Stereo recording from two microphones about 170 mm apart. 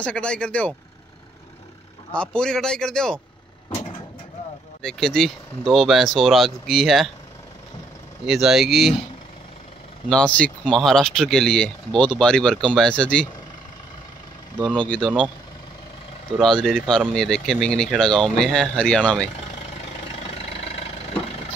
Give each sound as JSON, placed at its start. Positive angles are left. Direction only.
{"t": 0.0, "sound": "speech", "side_deg": 5}
{"t": 2.1, "sound": "speech", "side_deg": 5}
{"t": 4.8, "sound": "speech", "side_deg": 0}
{"t": 8.3, "sound": "speech", "side_deg": 0}
{"t": 10.0, "sound": "speech", "side_deg": 5}
{"t": 14.9, "sound": "speech", "side_deg": 5}
{"t": 16.3, "sound": "speech", "side_deg": 0}
{"t": 20.2, "sound": "vehicle", "side_deg": 35}